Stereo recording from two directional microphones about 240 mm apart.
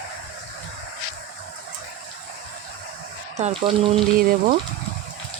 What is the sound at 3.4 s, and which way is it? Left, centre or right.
Speech, right.